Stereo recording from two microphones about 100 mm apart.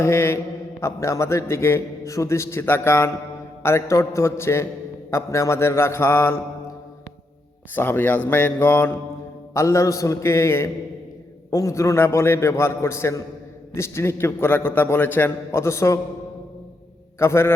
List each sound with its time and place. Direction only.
0.0 s a man's voice: 25° left (ahead or behind)
7.8 s a man's voice: 20° left (ahead or behind)
9.6 s a man's voice: 30° left (ahead or behind)
17.2 s a man's voice: 25° left (ahead or behind)